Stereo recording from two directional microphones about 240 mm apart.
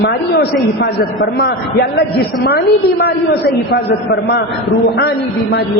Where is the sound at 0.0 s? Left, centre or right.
Left.